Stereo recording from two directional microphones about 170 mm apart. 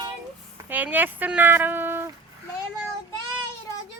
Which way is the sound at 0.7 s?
10° right (ahead or behind).